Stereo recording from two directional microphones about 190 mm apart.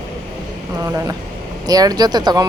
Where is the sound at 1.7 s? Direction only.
20° right (ahead or behind).